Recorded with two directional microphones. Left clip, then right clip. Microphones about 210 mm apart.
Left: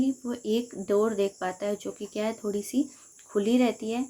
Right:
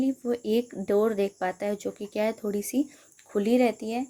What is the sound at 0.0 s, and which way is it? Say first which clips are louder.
Speech: right 2 dB; 30° right (ahead or behind).